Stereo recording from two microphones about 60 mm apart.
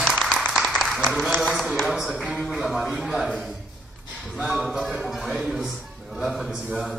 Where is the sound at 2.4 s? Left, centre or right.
Centre.